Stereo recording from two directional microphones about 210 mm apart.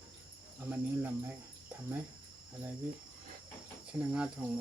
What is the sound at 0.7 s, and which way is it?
Speech, 10° right (ahead or behind).